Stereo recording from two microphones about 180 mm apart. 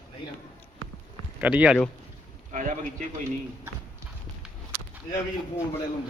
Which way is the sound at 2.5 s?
45° right (ahead or behind).